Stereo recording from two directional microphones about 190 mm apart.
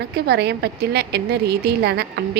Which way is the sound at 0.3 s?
55° right (ahead or behind).